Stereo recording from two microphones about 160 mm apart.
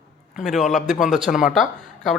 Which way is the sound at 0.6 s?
50° left (ahead or behind).